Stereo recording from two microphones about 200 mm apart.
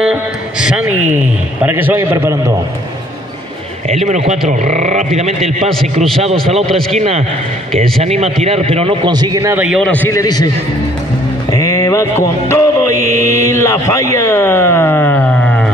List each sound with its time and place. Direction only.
0.0 s a sound: 5° right (ahead or behind)
1.6 s a man's voice: 10° right (ahead or behind)
3.9 s a man's voice: 35° right (ahead or behind); by 9.8 s 10° right (ahead or behind)
9.8 s speech: 5° left (ahead or behind)
11.5 s music: 15° left (ahead or behind)
13.0 s a man's voice: 35° right (ahead or behind)
13.3 s speech: 15° left (ahead or behind)